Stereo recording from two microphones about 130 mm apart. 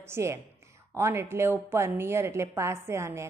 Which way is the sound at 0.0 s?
20° right (ahead or behind).